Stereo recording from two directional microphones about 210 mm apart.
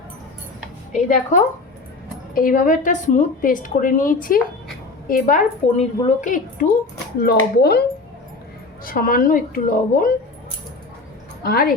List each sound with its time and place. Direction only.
0.9 s a woman's voice: 35° left (ahead or behind)
7.2 s a woman's voice: 50° left (ahead or behind)
11.4 s speech: 45° left (ahead or behind)